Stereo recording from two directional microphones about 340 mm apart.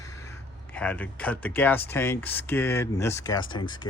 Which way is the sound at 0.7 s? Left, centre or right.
Centre.